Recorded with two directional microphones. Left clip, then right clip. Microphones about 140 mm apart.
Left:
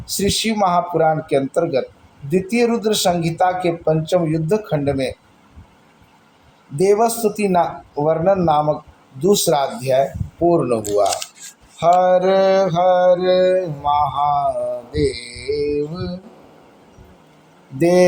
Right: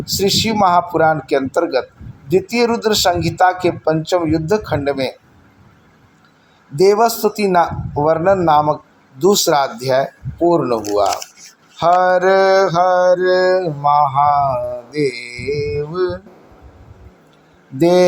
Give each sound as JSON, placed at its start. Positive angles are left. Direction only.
{"t": 0.0, "sound": "speech", "side_deg": -40}
{"t": 6.7, "sound": "mantra", "side_deg": -45}
{"t": 10.4, "sound": "speech", "side_deg": -30}
{"t": 11.8, "sound": "mantra", "side_deg": -40}
{"t": 14.9, "sound": "speech", "side_deg": -55}
{"t": 17.7, "sound": "speech", "side_deg": -30}